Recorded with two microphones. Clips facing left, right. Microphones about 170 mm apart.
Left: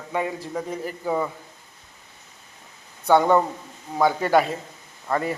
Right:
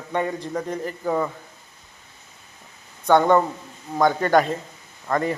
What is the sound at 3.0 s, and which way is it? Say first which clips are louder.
A man's voice: right 1 dB; 10° left (ahead or behind).